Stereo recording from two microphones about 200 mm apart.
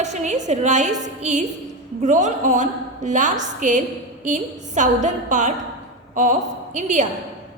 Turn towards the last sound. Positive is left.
turn(degrees=-40)  # may be behind; listen again after turning